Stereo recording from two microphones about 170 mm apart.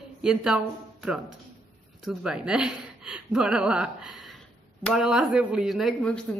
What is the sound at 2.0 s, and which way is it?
Speech, 5° right (ahead or behind).